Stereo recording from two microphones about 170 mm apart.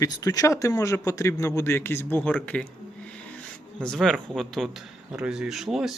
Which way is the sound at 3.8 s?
Centre (ahead or behind).